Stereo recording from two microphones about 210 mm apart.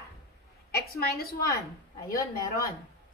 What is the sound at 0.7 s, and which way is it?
Speech, 45° left (ahead or behind).